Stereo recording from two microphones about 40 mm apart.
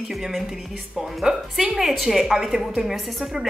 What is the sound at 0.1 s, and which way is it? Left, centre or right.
A woman's voice, centre.